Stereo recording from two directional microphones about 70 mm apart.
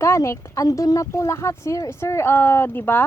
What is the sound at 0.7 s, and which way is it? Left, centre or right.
A woman's voice, left.